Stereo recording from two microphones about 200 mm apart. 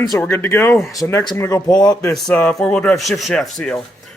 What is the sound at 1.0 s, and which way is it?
Speech, 20° left (ahead or behind).